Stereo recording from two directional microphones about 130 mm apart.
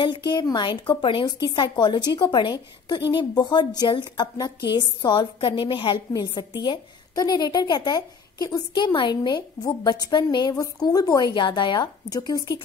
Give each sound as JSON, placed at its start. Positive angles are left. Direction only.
{"t": 0.0, "sound": "a woman's voice", "side_deg": 35}